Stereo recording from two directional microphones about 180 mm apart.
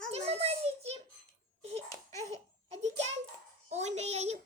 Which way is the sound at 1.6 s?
35° right (ahead or behind).